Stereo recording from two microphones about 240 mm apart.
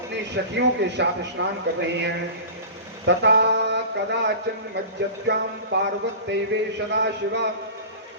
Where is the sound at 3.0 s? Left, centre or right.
Right.